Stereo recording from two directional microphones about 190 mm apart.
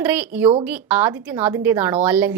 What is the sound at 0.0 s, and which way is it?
A woman's voice, 10° right (ahead or behind).